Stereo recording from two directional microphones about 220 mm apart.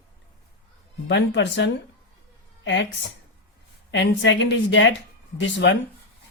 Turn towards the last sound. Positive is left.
turn(degrees=55)  # may be behind; listen again after turning